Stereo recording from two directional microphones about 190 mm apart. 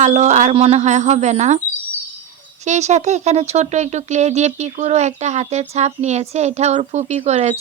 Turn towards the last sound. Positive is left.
turn(degrees=-35)  # may be behind; listen again after turning